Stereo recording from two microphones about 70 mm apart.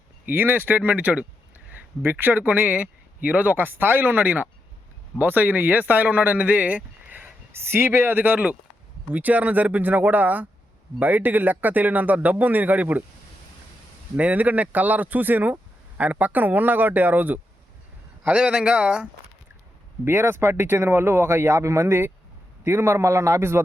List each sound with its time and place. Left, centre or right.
0.3 s speech: right
14.2 s speech: right
18.3 s speech: centre
20.1 s speech: right